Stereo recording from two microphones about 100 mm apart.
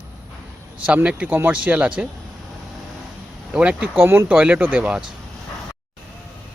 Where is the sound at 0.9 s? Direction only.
15° right (ahead or behind).